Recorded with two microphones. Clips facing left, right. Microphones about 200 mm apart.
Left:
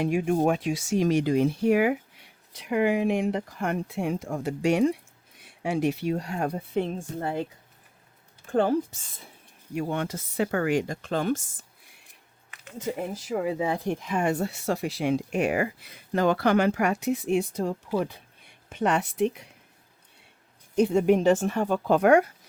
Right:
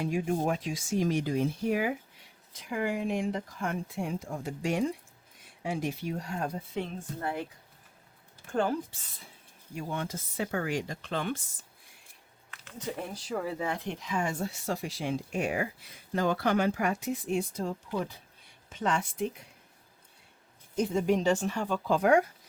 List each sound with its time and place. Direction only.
0.0 s speech: 70° left (ahead or behind)
7.2 s speech: 25° left (ahead or behind)
8.5 s speech: 25° left (ahead or behind)
9.7 s speech: 70° left (ahead or behind); by 11.4 s 40° left (ahead or behind)
12.5 s speech: 20° left (ahead or behind)
13.7 s speech: 45° left (ahead or behind); by 19.5 s 70° left (ahead or behind)
20.7 s speech: 65° left (ahead or behind)